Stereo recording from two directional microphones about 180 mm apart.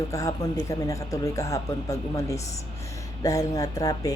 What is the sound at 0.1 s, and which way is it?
A woman's voice, 20° left (ahead or behind).